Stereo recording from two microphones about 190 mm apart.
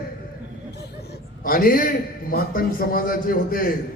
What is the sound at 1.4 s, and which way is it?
A man's voice, 50° left (ahead or behind).